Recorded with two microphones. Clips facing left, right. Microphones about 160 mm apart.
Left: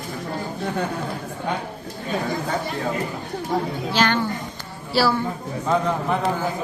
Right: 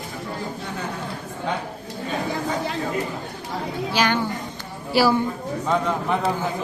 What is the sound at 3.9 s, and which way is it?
A woman's voice, 10° right (ahead or behind).